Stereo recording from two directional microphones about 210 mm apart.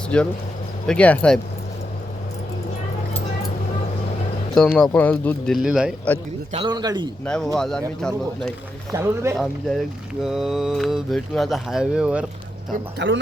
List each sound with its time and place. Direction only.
0.1 s speech: 5° left (ahead or behind)
4.5 s speech: centre (ahead or behind)
6.5 s a man's voice: 25° right (ahead or behind)
7.3 s speech: 5° left (ahead or behind)
8.9 s speech: 15° right (ahead or behind)
9.4 s speech: centre (ahead or behind)
13.0 s speech: 60° right (ahead or behind)